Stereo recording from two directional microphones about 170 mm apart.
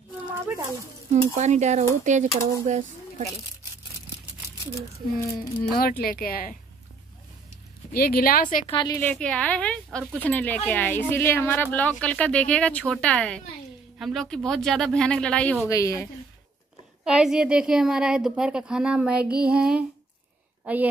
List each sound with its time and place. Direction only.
1.1 s speech: 45° right (ahead or behind)
5.6 s speech: 60° left (ahead or behind)
7.9 s speech: 60° left (ahead or behind)
8.6 s a woman's voice: 25° left (ahead or behind)
8.9 s a woman's voice: 10° left (ahead or behind)
17.0 s a woman's voice: 5° right (ahead or behind)